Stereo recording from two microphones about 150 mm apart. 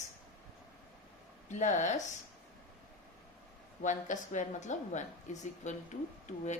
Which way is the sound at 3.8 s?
55° left (ahead or behind).